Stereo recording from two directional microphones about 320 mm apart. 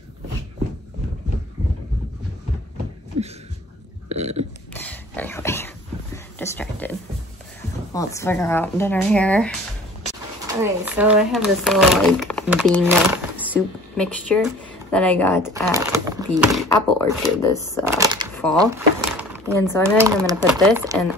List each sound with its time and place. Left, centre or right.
3.1 s a sound: right
4.1 s burping: centre
4.7 s a sound: centre
7.9 s speech: centre
10.6 s speech: centre
15.7 s speech: centre
16.6 s speech: centre
17.9 s a sound: centre
19.6 s speech: centre
20.0 s speech: centre